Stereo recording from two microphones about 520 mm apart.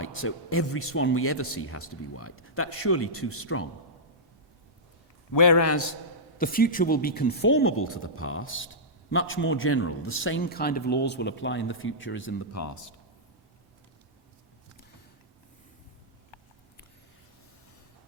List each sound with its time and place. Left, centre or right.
0.0 s speech: left
5.3 s a man's voice: left
6.4 s speech: centre; by 12.9 s left